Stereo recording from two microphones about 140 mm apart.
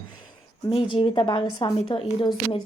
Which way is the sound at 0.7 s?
40° left (ahead or behind).